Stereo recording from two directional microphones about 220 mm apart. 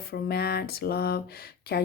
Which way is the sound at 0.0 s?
45° left (ahead or behind).